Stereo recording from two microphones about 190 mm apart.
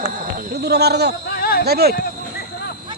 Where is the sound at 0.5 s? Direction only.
60° right (ahead or behind).